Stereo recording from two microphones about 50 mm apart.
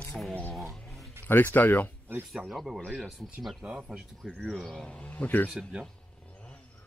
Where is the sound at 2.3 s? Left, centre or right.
Centre.